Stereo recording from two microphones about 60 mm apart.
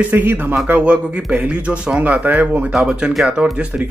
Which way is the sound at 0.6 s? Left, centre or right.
Centre.